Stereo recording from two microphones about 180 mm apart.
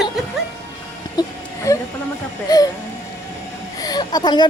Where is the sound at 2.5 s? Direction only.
20° left (ahead or behind).